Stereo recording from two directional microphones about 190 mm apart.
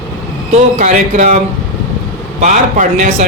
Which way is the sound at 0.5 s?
40° right (ahead or behind).